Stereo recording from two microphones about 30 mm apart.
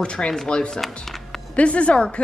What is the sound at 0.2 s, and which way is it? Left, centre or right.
Speech, left.